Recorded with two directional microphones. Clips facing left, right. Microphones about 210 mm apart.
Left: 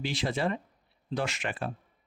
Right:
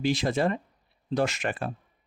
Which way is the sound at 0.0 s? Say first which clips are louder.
Right 5 dB; 45° right (ahead or behind).